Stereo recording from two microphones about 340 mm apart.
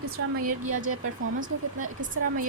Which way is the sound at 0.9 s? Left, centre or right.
Right.